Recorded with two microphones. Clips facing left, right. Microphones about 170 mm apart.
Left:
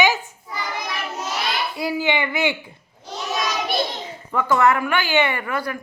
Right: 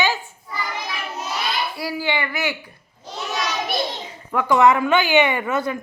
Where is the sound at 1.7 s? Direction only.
20° left (ahead or behind).